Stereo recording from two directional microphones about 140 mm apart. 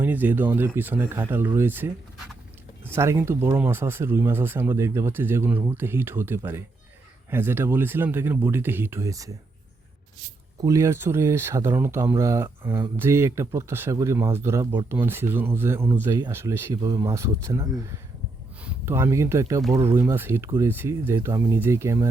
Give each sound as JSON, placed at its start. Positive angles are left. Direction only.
{"t": 0.0, "sound": "speech", "side_deg": -15}
{"t": 2.9, "sound": "speech", "side_deg": -20}
{"t": 10.6, "sound": "speech", "side_deg": -20}